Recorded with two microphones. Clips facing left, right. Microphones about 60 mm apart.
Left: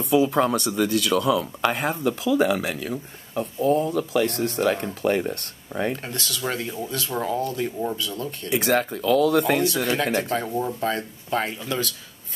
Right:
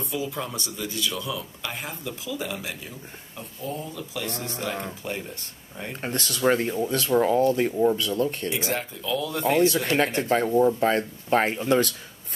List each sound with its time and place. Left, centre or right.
0.0 s speech: left
5.9 s speech: right
8.5 s speech: left
10.4 s speech: centre
10.8 s speech: right